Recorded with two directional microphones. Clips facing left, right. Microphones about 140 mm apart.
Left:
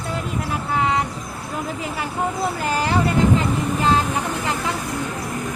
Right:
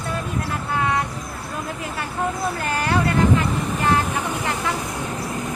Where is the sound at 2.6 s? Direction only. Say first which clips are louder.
Left 1 dB; 20° left (ahead or behind).